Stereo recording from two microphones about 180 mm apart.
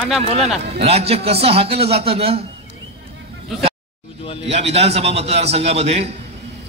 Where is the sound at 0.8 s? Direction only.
35° right (ahead or behind).